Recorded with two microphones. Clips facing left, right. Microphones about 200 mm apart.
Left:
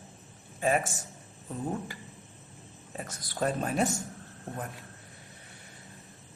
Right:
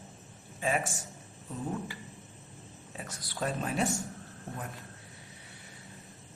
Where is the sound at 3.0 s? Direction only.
45° left (ahead or behind).